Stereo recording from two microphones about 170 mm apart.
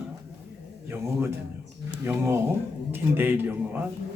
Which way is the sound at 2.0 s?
15° right (ahead or behind).